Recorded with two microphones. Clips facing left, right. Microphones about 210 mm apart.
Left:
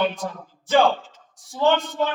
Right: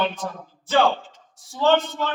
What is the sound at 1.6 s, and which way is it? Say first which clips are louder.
Speech: even; 15° left (ahead or behind).